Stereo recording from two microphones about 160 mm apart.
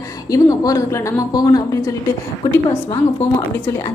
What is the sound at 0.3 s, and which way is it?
A woman's voice, 20° left (ahead or behind).